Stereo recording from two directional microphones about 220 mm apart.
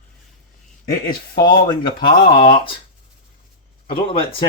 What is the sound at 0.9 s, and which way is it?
Speech, 15° left (ahead or behind).